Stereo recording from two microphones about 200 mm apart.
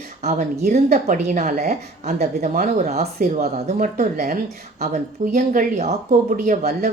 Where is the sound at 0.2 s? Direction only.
35° right (ahead or behind).